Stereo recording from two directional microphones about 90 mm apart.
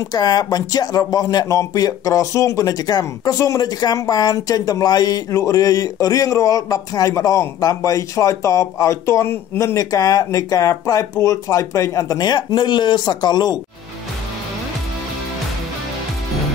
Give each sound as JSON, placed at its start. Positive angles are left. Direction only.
{"t": 0.1, "sound": "speech", "side_deg": 50}
{"t": 9.8, "sound": "speech", "side_deg": 40}